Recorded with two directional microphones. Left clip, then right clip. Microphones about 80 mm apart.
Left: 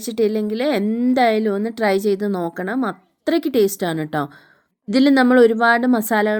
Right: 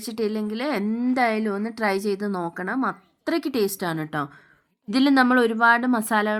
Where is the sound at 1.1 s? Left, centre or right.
Left.